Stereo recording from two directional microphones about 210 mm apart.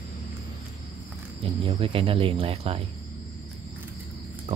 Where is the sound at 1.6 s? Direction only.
25° right (ahead or behind).